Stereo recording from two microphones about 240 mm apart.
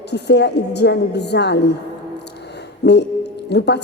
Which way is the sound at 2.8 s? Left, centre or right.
Left.